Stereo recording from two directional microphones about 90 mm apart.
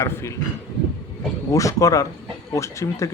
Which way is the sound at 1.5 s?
40° left (ahead or behind).